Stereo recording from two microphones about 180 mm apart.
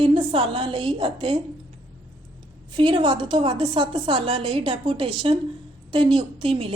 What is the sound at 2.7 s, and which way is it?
A woman's voice, 25° right (ahead or behind).